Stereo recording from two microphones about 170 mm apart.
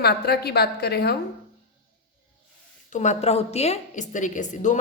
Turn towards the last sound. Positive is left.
turn(degrees=45)  # may be behind; listen again after turning